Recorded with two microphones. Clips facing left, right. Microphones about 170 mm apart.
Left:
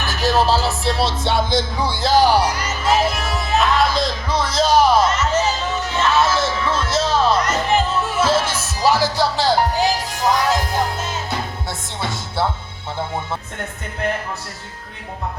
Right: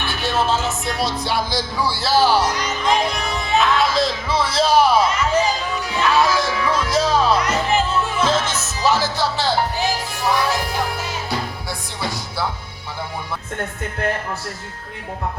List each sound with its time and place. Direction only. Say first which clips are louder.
0.0 s music: left 3 dB; 40° left (ahead or behind); by 12.5 s 25° left (ahead or behind)